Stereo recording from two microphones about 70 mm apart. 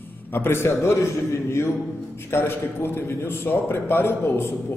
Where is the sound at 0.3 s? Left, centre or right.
Left.